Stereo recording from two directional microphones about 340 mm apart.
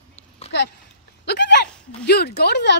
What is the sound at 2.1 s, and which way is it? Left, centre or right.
Speech, left.